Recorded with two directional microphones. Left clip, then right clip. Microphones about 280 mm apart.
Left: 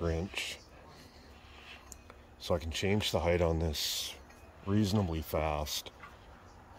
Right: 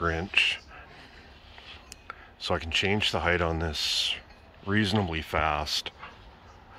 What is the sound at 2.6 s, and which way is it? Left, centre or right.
Speech, centre.